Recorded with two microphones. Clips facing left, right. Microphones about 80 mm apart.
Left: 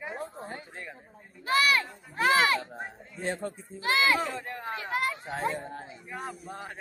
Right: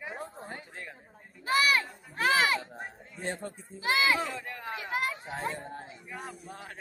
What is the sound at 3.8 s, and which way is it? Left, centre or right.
Speech, centre.